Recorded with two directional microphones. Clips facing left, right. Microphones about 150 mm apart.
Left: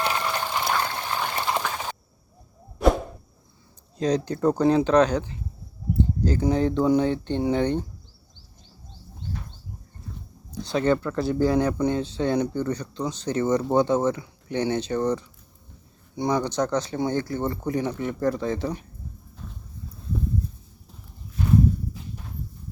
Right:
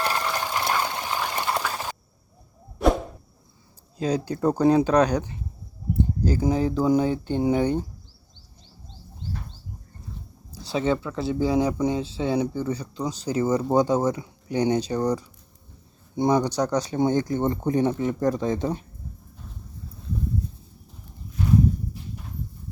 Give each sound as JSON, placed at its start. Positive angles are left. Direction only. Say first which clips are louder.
{"t": 0.0, "sound": "horse", "louder": "even", "side_deg": 0}
{"t": 4.0, "sound": "speech", "louder": "left 1 dB", "side_deg": -10}
{"t": 6.0, "sound": "a sound", "louder": "even", "side_deg": -10}
{"t": 6.5, "sound": "speech", "louder": "left 1 dB", "side_deg": -5}
{"t": 10.6, "sound": "speech", "louder": "left 2 dB", "side_deg": -5}